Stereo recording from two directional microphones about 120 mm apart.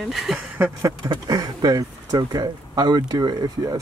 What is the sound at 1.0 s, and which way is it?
Speech, 35° right (ahead or behind).